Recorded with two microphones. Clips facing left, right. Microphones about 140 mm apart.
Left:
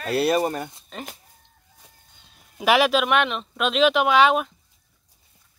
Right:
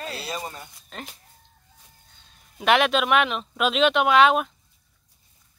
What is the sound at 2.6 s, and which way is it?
Speech, 5° left (ahead or behind).